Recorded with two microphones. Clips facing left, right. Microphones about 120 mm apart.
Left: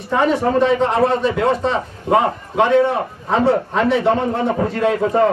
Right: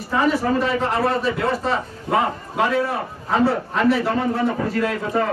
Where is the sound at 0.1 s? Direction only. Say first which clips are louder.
Left 3 dB; centre (ahead or behind).